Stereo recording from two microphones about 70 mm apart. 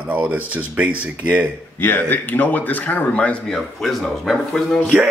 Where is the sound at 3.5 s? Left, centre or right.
Centre.